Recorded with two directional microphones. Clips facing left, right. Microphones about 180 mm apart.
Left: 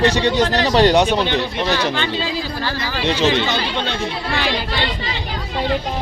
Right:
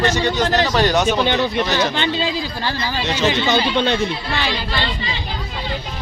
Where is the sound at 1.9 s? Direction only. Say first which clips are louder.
Right 1 dB; 25° right (ahead or behind).